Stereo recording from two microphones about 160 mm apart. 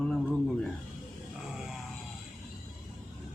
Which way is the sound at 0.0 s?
5° left (ahead or behind).